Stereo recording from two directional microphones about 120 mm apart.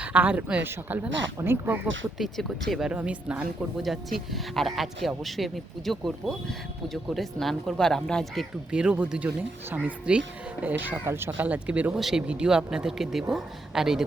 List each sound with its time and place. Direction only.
0.0 s speech: 15° right (ahead or behind)
2.1 s speech: centre (ahead or behind)